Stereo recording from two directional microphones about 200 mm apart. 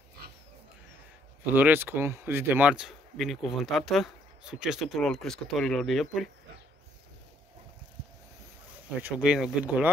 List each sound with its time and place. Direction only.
1.4 s speech: 10° right (ahead or behind)
9.0 s speech: 5° right (ahead or behind)